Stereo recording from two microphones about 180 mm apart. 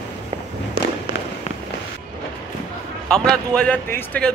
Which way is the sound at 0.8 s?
60° right (ahead or behind).